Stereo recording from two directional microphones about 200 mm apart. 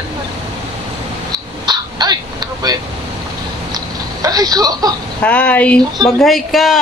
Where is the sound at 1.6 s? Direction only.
20° right (ahead or behind).